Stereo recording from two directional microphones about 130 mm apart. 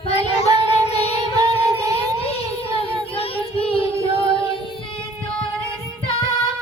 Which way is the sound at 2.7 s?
45° left (ahead or behind).